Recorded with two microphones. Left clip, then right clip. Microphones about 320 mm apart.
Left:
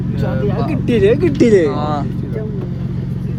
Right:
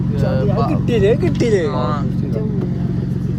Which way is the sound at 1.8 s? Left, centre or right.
Centre.